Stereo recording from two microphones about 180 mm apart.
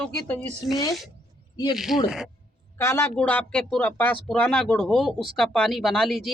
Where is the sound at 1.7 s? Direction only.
Centre (ahead or behind).